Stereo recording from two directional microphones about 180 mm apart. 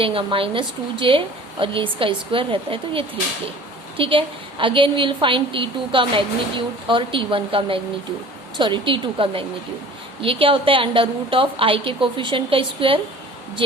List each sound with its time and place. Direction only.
0.0 s a woman's voice: 30° right (ahead or behind)